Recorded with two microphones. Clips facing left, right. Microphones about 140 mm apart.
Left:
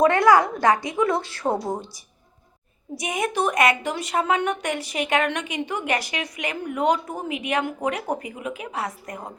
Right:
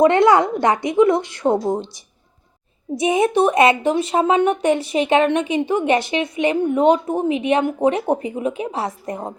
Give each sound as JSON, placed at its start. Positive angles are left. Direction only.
{"t": 0.0, "sound": "a woman's voice", "side_deg": -25}
{"t": 3.0, "sound": "a woman's voice", "side_deg": -25}